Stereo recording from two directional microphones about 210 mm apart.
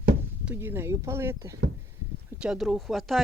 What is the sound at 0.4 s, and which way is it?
Speech, 10° right (ahead or behind).